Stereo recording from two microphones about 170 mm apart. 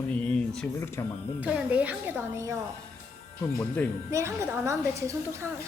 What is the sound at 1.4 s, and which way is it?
A woman's voice, 10° right (ahead or behind).